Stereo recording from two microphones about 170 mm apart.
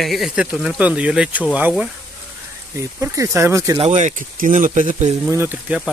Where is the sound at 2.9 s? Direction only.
15° right (ahead or behind).